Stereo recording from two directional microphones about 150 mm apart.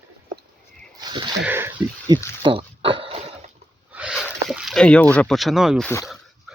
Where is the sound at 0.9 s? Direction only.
30° right (ahead or behind).